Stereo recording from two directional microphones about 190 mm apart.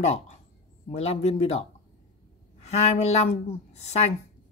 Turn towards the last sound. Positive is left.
turn(degrees=35)  # may be behind; listen again after turning